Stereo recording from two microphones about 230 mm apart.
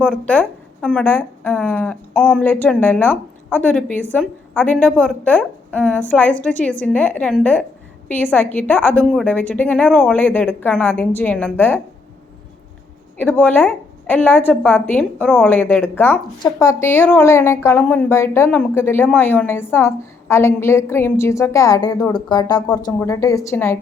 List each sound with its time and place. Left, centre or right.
0.1 s a woman's voice: centre
13.1 s a woman's voice: centre